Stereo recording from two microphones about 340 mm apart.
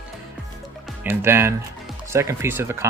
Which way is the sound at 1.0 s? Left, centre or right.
Centre.